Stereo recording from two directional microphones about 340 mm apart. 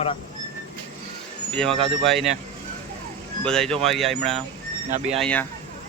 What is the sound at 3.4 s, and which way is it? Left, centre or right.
Speech, centre.